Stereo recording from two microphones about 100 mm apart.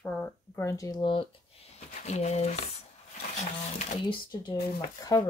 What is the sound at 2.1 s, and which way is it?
Speech, 90° left.